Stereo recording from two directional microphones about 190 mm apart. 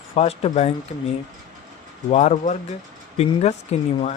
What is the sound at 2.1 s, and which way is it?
Speech, 35° left (ahead or behind).